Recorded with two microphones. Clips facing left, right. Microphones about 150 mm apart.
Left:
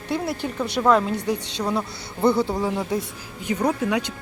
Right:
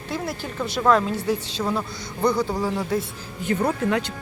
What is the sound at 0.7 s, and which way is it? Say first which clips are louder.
A woman's voice: even; 15° left (ahead or behind).